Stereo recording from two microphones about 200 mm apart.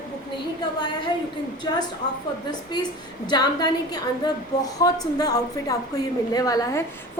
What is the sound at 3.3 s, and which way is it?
A woman's voice, 20° left (ahead or behind).